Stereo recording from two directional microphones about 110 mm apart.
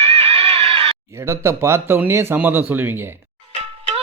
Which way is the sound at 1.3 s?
25° right (ahead or behind).